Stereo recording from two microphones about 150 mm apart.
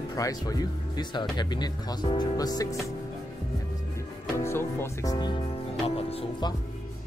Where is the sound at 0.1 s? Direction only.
25° left (ahead or behind).